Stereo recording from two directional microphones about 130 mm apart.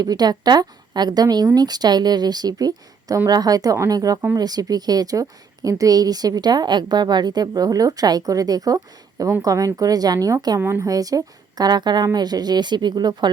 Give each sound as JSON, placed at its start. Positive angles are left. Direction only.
{"t": 0.0, "sound": "a woman's voice", "side_deg": -30}